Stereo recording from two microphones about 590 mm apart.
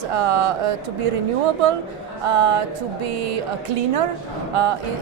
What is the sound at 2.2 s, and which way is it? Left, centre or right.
Music, right.